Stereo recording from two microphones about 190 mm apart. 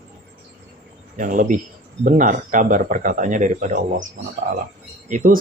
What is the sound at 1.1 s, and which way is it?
Speech, 45° right (ahead or behind).